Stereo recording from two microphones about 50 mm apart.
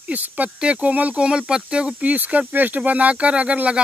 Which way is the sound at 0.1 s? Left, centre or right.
Right.